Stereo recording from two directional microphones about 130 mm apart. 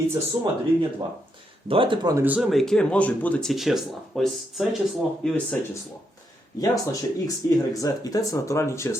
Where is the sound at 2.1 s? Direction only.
20° right (ahead or behind).